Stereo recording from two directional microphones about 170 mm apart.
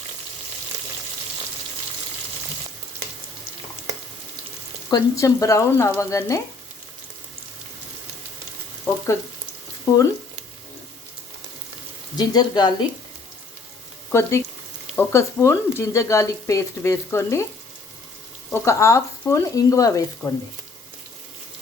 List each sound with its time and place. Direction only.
4.9 s speech: 20° left (ahead or behind)
9.9 s speech: 20° left (ahead or behind)
12.1 s speech: 25° left (ahead or behind)
14.1 s speech: 15° left (ahead or behind)
18.5 s speech: 15° left (ahead or behind)